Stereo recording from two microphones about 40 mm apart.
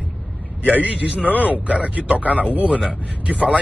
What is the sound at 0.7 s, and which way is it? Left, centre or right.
Speech, right.